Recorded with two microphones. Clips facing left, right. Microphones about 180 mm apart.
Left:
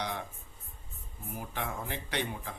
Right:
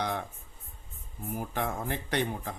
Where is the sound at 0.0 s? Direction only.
50° right (ahead or behind).